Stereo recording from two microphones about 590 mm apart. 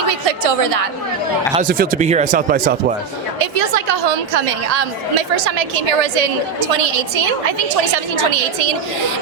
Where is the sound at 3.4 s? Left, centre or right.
Right.